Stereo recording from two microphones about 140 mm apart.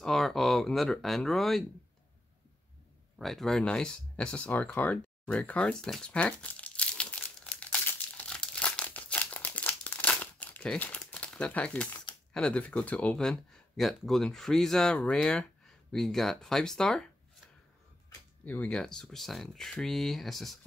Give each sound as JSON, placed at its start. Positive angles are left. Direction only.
{"t": 0.0, "sound": "speech", "side_deg": 0}
{"t": 3.2, "sound": "speech", "side_deg": 0}
{"t": 8.3, "sound": "crumpling", "side_deg": 10}
{"t": 12.4, "sound": "speech", "side_deg": 10}
{"t": 18.4, "sound": "speech", "side_deg": 10}